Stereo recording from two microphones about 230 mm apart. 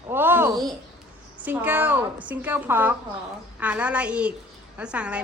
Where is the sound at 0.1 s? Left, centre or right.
Centre.